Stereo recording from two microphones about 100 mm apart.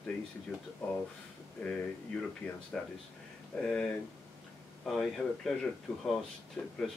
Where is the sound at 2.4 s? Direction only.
15° left (ahead or behind).